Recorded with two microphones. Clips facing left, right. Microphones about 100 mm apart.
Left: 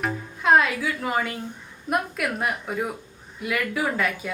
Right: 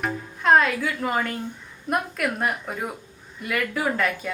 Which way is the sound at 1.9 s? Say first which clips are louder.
Even; centre (ahead or behind).